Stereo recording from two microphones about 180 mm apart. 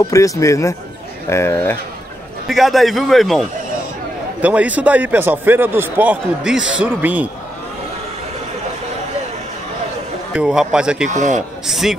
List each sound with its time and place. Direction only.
0.1 s speech: 15° left (ahead or behind)
2.4 s a man's voice: centre (ahead or behind)
10.3 s a man's voice: 5° right (ahead or behind)
11.1 s speech: 40° right (ahead or behind)
11.6 s a man's voice: centre (ahead or behind)